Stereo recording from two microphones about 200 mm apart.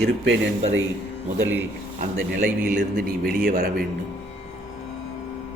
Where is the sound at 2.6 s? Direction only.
45° right (ahead or behind).